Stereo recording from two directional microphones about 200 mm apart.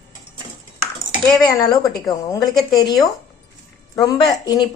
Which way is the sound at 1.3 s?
20° left (ahead or behind).